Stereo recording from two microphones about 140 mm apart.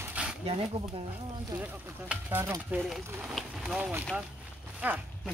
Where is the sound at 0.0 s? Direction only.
10° right (ahead or behind).